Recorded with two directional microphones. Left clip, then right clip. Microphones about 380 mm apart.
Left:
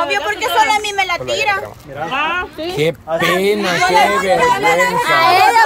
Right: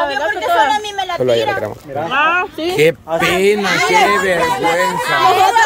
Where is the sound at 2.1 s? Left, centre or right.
Centre.